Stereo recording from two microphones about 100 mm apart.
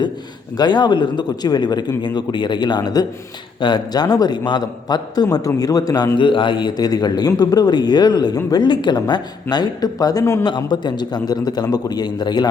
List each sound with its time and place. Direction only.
0.5 s a man's voice: 45° left (ahead or behind)
6.1 s a man's voice: 55° left (ahead or behind); by 10.4 s 35° left (ahead or behind)
10.4 s a man's voice: 50° left (ahead or behind)